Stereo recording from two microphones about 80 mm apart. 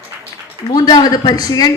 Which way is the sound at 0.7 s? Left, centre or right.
Left.